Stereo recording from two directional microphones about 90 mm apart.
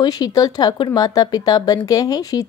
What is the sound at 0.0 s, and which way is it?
Speech, 45° left (ahead or behind).